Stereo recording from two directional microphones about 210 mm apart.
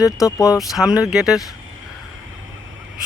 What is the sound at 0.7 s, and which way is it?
Speech, 5° right (ahead or behind).